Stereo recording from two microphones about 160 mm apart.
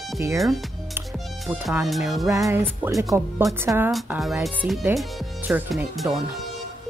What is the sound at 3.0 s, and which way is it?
Speech, 20° right (ahead or behind).